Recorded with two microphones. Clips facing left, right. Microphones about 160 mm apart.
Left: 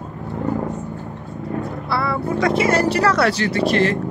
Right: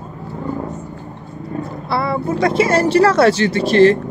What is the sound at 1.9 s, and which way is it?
Speech, 25° right (ahead or behind).